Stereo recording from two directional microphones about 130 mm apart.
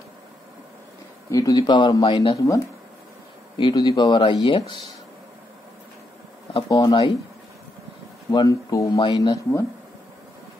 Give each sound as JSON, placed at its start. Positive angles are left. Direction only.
{"t": 1.3, "sound": "speech", "side_deg": 30}
{"t": 3.5, "sound": "speech", "side_deg": 35}
{"t": 6.7, "sound": "speech", "side_deg": 35}
{"t": 8.3, "sound": "speech", "side_deg": 30}